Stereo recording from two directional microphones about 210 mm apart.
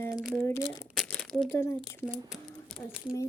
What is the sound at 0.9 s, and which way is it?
Crumpling, 5° left (ahead or behind).